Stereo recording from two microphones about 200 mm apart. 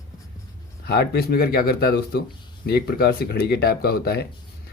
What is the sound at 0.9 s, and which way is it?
Speech, 50° left (ahead or behind).